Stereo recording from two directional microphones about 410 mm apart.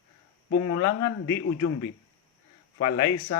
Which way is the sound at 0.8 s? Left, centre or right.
Centre.